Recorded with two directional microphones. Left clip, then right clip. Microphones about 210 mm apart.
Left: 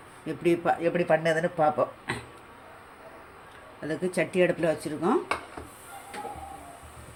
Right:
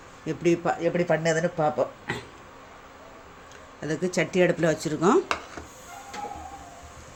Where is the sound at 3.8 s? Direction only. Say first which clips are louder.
Right 2 dB; 20° right (ahead or behind).